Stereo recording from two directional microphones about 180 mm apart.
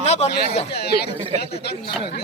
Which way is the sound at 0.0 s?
35° left (ahead or behind).